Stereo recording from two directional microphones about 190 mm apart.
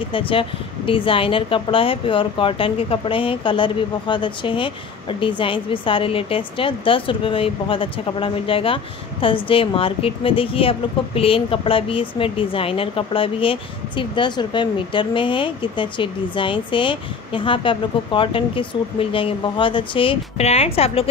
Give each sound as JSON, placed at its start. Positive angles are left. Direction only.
{"t": 0.1, "sound": "a woman's voice", "side_deg": 30}